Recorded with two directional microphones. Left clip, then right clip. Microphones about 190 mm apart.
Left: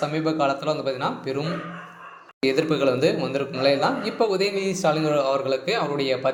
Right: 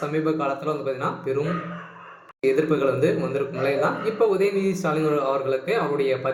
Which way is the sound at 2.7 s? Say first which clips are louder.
Left 1 dB; 25° left (ahead or behind).